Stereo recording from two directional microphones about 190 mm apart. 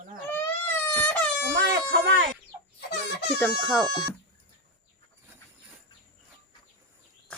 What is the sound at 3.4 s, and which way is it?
Speech, centre (ahead or behind).